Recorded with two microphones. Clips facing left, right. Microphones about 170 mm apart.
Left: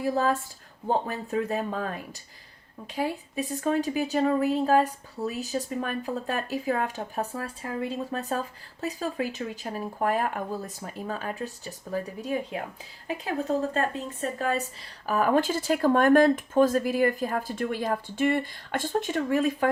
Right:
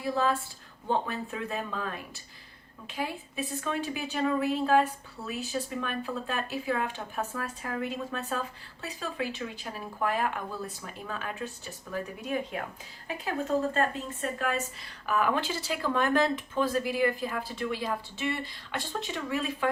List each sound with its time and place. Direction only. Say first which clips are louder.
0.0 s a woman's voice: left 3 dB; 45° left (ahead or behind)
2.9 s a woman's voice: left 5 dB; 40° left (ahead or behind)
13.7 s speech: left 1 dB; 40° left (ahead or behind)